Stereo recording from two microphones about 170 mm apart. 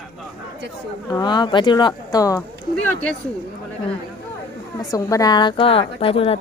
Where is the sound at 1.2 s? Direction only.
25° left (ahead or behind).